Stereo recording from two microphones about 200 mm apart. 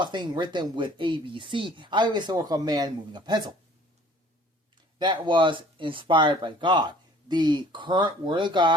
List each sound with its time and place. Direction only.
0.0 s speech: 25° right (ahead or behind)
4.9 s speech: 20° right (ahead or behind)